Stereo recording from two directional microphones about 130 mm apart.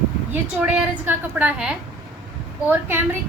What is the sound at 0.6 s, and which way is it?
A woman's voice, 10° right (ahead or behind).